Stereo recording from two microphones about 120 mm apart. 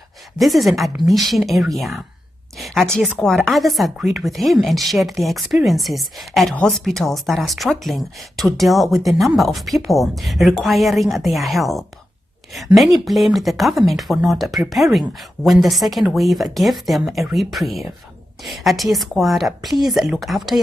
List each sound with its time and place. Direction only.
0.4 s a woman's voice: centre (ahead or behind)